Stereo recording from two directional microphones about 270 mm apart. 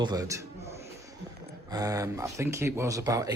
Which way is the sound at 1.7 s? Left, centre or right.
Centre.